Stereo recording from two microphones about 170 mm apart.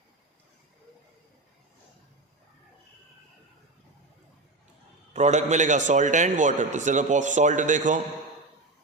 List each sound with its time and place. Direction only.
5.1 s a man's voice: 45° right (ahead or behind)